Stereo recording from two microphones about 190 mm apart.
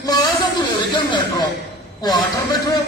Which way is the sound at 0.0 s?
20° left (ahead or behind).